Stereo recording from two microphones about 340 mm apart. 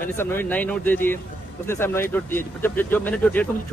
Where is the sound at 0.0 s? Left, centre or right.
Centre.